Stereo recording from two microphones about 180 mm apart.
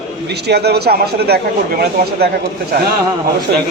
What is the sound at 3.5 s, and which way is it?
Speech, 65° right (ahead or behind).